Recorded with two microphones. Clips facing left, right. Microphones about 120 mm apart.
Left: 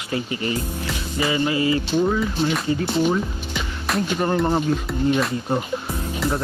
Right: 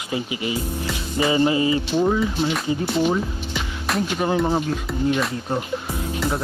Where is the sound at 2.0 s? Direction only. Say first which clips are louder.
Right 1 dB; 15° right (ahead or behind).